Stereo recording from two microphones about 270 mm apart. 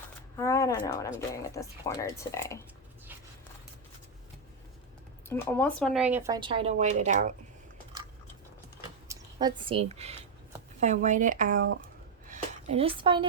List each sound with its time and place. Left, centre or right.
0.3 s shuffling cards: centre
0.9 s speech: centre
5.3 s speech: centre; by 7.3 s right
9.0 s speech: centre
12.3 s a sound: right